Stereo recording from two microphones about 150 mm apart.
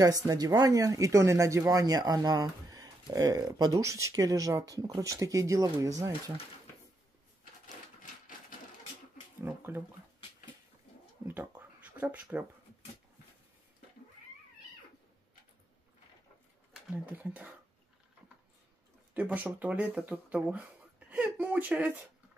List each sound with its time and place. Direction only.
0.0 s speech: 25° right (ahead or behind)
9.4 s speech: 15° right (ahead or behind)
11.2 s a sound: 10° right (ahead or behind)
16.9 s speech: 10° right (ahead or behind)
19.1 s speech: 10° right (ahead or behind)